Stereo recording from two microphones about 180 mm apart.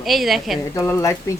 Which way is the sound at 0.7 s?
15° left (ahead or behind).